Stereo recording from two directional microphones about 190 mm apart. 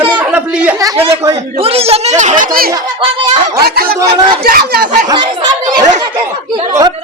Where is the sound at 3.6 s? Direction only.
50° right (ahead or behind).